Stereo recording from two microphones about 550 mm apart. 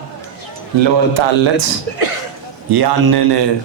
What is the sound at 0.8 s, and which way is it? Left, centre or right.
Speech, right.